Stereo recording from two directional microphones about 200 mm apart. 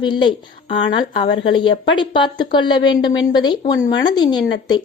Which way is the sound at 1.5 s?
25° left (ahead or behind).